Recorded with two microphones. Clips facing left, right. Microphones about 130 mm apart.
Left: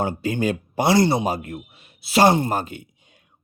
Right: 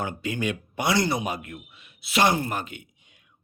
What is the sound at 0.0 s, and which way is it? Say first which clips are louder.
A man's voice: left 6 dB; 35° left (ahead or behind).